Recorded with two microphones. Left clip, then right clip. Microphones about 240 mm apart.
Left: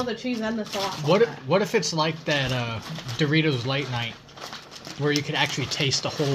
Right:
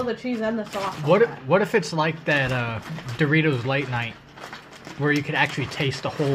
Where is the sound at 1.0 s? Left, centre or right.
Centre.